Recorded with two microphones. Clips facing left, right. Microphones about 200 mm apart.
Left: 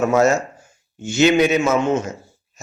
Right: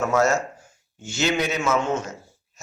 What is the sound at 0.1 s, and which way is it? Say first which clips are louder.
Speech: left 5 dB; 20° left (ahead or behind).